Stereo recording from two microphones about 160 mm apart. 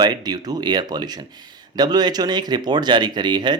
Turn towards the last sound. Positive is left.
turn(degrees=-25)  # may be behind; listen again after turning